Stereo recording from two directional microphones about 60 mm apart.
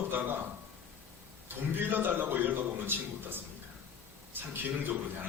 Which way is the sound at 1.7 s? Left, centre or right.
Right.